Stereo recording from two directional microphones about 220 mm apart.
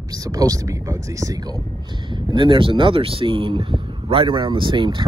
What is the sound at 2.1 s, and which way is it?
Speech, 20° right (ahead or behind).